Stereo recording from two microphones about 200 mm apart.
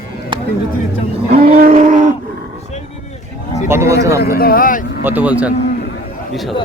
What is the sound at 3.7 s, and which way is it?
Speech, 15° right (ahead or behind).